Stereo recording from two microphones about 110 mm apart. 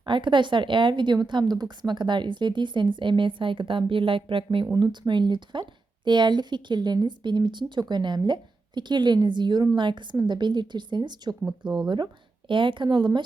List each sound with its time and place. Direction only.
0.0 s a woman's voice: 45° right (ahead or behind)